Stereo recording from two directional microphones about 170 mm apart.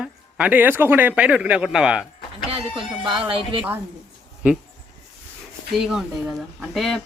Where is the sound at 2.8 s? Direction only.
30° right (ahead or behind).